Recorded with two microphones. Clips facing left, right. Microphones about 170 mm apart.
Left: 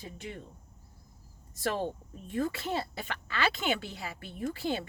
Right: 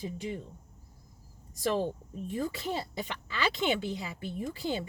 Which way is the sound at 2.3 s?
15° right (ahead or behind).